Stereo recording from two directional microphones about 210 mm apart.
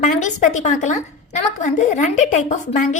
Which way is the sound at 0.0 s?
35° left (ahead or behind).